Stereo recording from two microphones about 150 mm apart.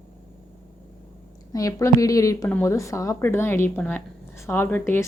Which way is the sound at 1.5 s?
20° left (ahead or behind).